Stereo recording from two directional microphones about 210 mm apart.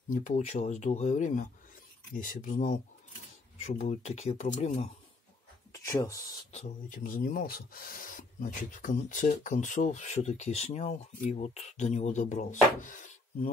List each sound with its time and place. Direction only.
0.1 s speech: 35° left (ahead or behind)
5.7 s speech: 15° left (ahead or behind)
6.5 s speech: 35° left (ahead or behind)